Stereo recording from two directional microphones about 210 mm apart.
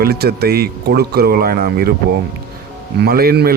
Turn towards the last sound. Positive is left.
turn(degrees=-45)  # may be behind; listen again after turning